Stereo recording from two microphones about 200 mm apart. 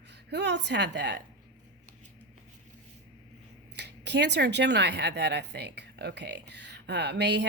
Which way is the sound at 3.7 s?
60° right (ahead or behind).